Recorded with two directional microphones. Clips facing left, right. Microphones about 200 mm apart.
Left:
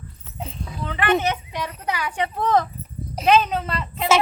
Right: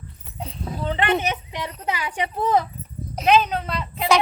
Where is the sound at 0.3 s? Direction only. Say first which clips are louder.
Even; centre (ahead or behind).